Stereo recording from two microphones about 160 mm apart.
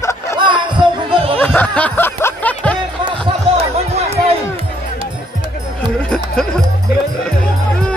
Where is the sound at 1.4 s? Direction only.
10° left (ahead or behind).